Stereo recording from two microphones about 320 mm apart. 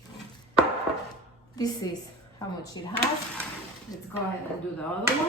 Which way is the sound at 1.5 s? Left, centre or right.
Centre.